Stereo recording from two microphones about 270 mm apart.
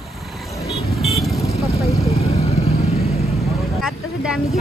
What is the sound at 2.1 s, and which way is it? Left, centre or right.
Vehicle, left.